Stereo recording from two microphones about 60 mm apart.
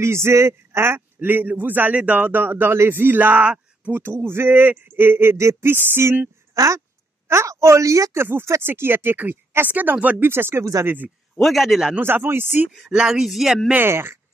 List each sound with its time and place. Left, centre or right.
0.0 s speech: right
3.4 s a sound: right
3.9 s speech: right
6.5 s speech: right
10.2 s speech: right
10.6 s speech: right
11.3 s a man's voice: centre
12.0 s speech: right
12.9 s speech: centre
13.7 s speech: right